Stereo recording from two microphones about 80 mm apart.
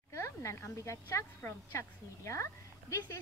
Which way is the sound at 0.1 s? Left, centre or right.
Left.